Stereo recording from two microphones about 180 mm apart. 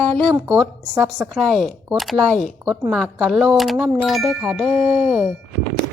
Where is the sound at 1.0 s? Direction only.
5° right (ahead or behind).